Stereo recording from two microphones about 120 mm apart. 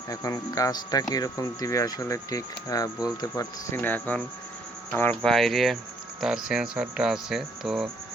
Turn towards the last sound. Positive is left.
turn(degrees=-5)  # may be behind; listen again after turning